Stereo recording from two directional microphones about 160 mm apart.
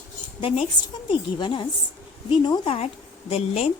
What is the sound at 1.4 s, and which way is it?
Speech, 30° left (ahead or behind).